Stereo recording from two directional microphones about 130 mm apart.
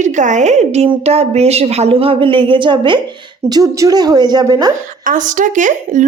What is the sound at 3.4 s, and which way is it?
A woman's voice, 25° right (ahead or behind).